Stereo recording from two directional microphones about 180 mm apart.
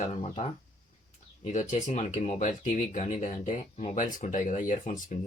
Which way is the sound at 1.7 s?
40° left (ahead or behind).